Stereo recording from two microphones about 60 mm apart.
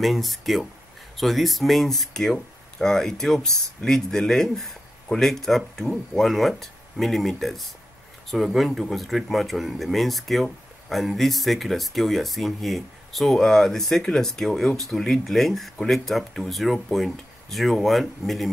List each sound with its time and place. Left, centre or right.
0.0 s speech: centre